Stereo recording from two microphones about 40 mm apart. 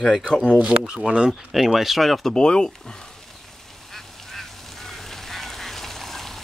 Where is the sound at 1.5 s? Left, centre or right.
Centre.